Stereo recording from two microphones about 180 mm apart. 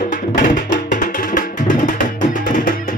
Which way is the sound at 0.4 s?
45° left (ahead or behind).